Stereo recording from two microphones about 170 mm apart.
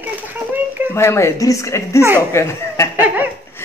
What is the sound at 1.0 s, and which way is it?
Speech, 15° left (ahead or behind).